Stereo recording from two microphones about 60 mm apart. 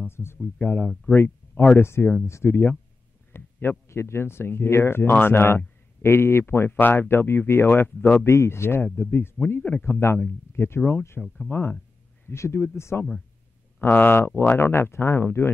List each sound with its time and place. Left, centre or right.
0.1 s speech: left
0.6 s speech: left
8.3 s speech: left
8.8 s speech: centre
9.8 s speech: left
11.1 s speech: centre
12.3 s speech: left